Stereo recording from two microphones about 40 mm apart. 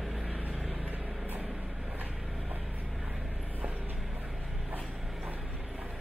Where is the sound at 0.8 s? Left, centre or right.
Right.